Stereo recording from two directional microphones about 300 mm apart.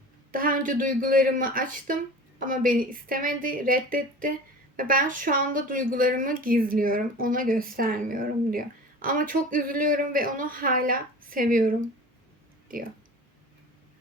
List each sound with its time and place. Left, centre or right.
0.3 s a woman's voice: right